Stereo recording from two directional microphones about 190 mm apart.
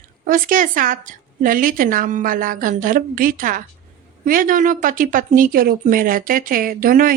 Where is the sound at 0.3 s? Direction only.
45° right (ahead or behind).